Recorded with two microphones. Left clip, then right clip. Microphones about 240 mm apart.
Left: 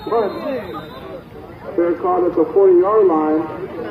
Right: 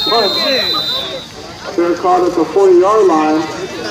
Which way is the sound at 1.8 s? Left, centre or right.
Right.